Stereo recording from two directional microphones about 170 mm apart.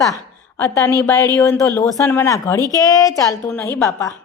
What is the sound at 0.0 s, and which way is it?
A woman's voice, 20° left (ahead or behind).